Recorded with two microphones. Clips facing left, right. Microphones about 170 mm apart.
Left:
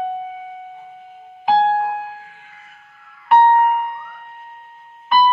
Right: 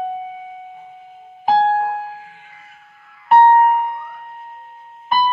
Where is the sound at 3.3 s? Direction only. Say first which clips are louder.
Right 2 dB; 35° right (ahead or behind).